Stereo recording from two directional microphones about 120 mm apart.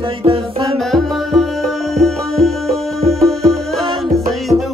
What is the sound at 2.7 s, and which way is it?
Music, 25° right (ahead or behind).